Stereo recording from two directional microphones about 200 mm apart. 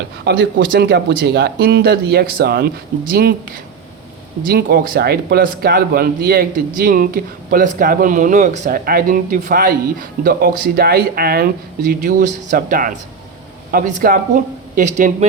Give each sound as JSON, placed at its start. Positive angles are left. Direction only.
{"t": 0.3, "sound": "speech", "side_deg": -50}
{"t": 4.4, "sound": "speech", "side_deg": -50}